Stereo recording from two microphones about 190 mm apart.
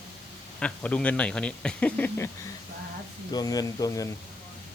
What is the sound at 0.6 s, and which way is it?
Speech, 5° left (ahead or behind).